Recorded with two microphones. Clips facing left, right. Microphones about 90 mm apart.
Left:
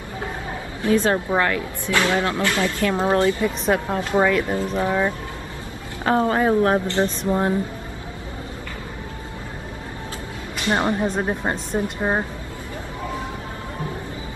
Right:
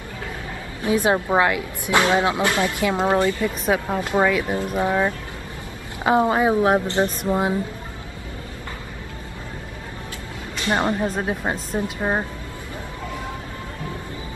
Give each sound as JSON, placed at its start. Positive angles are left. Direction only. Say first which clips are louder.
{"t": 0.8, "sound": "speech", "louder": "even", "side_deg": -15}
{"t": 3.3, "sound": "speech", "louder": "left 2 dB", "side_deg": 20}
{"t": 3.6, "sound": "a woman's voice", "louder": "right 1 dB", "side_deg": 0}
{"t": 10.8, "sound": "speech", "louder": "even", "side_deg": 15}
{"t": 11.1, "sound": "a woman's voice", "louder": "left 1 dB", "side_deg": 0}